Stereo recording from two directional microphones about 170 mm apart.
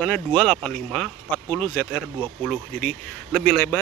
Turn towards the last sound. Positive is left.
turn(degrees=5)  # may be behind; listen again after turning